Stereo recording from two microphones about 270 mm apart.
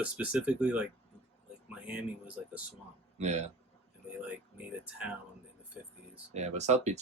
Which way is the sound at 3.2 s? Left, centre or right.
Right.